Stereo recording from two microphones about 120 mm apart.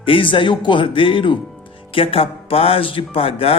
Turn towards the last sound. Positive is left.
turn(degrees=55)  # may be behind; listen again after turning